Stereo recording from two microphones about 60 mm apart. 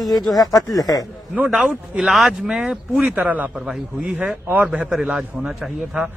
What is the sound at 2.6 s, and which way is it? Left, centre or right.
A man's voice, right.